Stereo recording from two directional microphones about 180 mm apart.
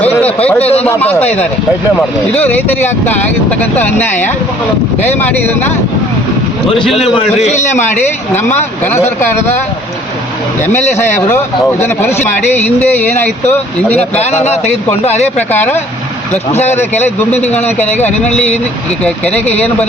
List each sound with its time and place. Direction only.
0.0 s a sound: 10° left (ahead or behind)
0.6 s a man's voice: 35° left (ahead or behind)
0.9 s speech: 10° left (ahead or behind)
1.2 s a man's voice: 35° left (ahead or behind)
2.0 s speech: 10° left (ahead or behind)
7.0 s a man's voice: centre (ahead or behind)
7.4 s a man's voice: 40° left (ahead or behind)
8.8 s speech: 15° left (ahead or behind)
10.6 s speech: 10° left (ahead or behind)
15.0 s a man's voice: 40° left (ahead or behind)
15.4 s speech: 10° left (ahead or behind)
16.3 s a man's voice: 40° left (ahead or behind)
19.0 s speech: 5° left (ahead or behind)